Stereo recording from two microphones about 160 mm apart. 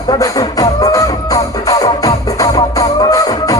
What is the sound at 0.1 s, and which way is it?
Music, 20° left (ahead or behind).